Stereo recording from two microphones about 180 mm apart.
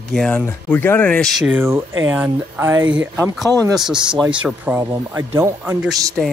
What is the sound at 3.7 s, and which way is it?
Speech, 5° right (ahead or behind).